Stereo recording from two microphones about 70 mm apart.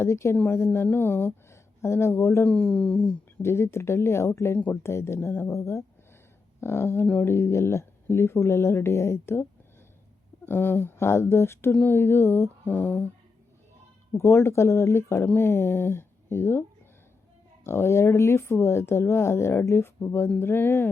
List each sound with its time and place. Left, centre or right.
0.0 s speech: left
2.5 s speech: centre
3.4 s speech: left
4.5 s speech: left
11.7 s speech: left
14.2 s speech: left